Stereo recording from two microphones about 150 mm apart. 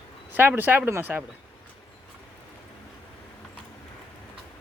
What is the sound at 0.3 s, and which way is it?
Speech, 10° right (ahead or behind).